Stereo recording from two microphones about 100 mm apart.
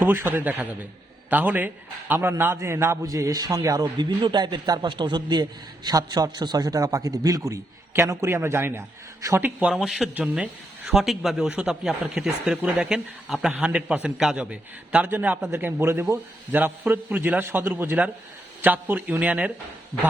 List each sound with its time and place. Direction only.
0.0 s a man's voice: 20° right (ahead or behind)
9.7 s speech: centre (ahead or behind)
10.2 s a man's voice: 15° right (ahead or behind)